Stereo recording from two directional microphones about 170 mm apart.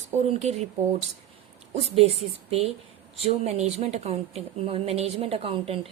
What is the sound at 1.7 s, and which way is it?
A woman's voice, 40° right (ahead or behind).